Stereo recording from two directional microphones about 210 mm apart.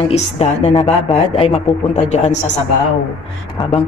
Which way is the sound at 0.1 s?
30° left (ahead or behind).